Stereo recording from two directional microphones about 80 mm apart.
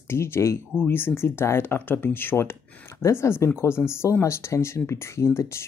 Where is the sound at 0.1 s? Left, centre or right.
Left.